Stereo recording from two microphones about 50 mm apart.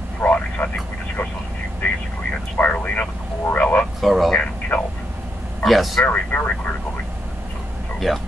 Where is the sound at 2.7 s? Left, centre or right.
Left.